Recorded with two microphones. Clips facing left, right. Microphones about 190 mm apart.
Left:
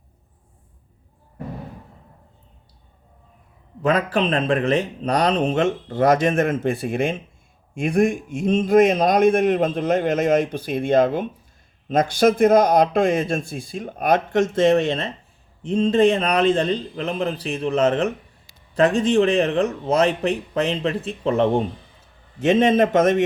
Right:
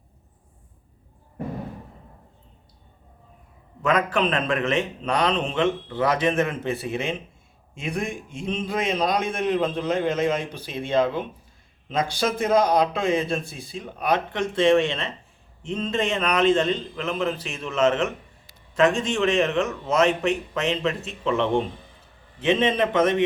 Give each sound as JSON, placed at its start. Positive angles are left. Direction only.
{"t": 3.8, "sound": "a man's voice", "side_deg": 35}